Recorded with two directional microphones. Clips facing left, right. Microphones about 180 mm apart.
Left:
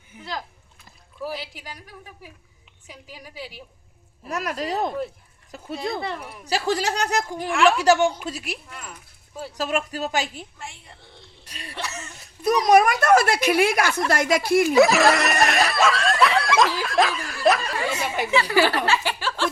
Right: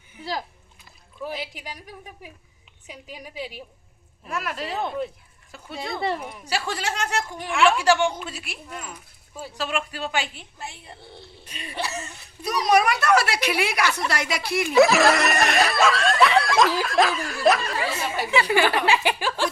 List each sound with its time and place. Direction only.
1.4 s speech: 15° right (ahead or behind)
2.8 s a woman's voice: 20° right (ahead or behind)
4.3 s speech: 40° left (ahead or behind)
7.5 s speech: centre (ahead or behind)
7.8 s speech: 40° left (ahead or behind)
9.6 s speech: 40° left (ahead or behind)
11.8 s speech: 35° right (ahead or behind)
12.4 s a woman's voice: 50° left (ahead or behind)
14.8 s snicker: centre (ahead or behind)
17.9 s speech: 15° left (ahead or behind)
18.9 s speech: 15° right (ahead or behind)